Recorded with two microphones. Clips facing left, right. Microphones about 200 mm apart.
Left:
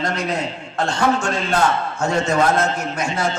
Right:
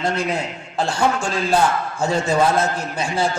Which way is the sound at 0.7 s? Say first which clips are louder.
Left 1 dB; 30° right (ahead or behind).